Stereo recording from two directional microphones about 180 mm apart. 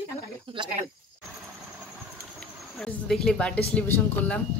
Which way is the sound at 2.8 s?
5° left (ahead or behind).